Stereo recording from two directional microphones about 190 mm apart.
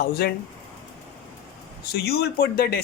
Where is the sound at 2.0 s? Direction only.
55° left (ahead or behind).